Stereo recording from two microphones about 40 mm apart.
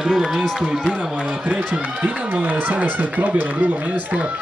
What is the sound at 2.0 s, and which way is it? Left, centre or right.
Speech, right.